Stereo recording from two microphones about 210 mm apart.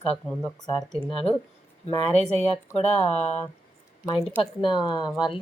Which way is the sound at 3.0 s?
5° left (ahead or behind).